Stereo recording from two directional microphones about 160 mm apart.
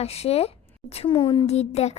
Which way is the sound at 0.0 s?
40° left (ahead or behind).